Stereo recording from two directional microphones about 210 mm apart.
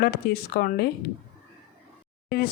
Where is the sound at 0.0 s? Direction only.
45° left (ahead or behind).